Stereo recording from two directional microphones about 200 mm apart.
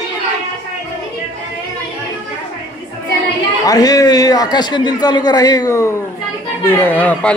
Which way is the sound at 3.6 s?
20° left (ahead or behind).